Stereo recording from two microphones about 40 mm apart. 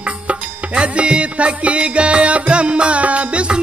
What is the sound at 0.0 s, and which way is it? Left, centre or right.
Music, right.